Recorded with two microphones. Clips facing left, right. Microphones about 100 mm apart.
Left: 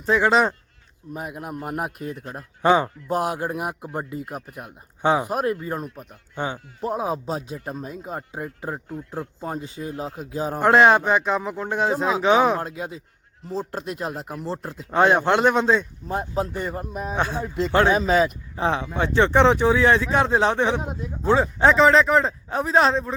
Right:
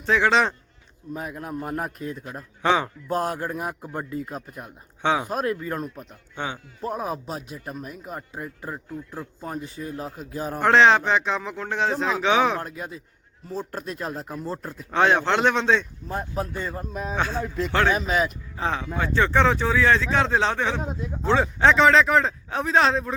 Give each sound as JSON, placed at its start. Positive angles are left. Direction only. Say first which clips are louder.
{"t": 0.0, "sound": "a man's voice", "louder": "left 2 dB", "side_deg": 5}
{"t": 16.0, "sound": "a man's voice", "louder": "left 3 dB", "side_deg": 25}
{"t": 18.0, "sound": "a man's voice", "louder": "left 5 dB", "side_deg": 30}
{"t": 18.5, "sound": "a man's voice", "louder": "left 2 dB", "side_deg": 20}
{"t": 20.9, "sound": "a man's voice", "louder": "left 2 dB", "side_deg": 5}